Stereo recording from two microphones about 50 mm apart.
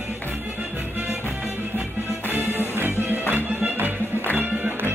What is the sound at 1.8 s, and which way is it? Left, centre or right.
Music, right.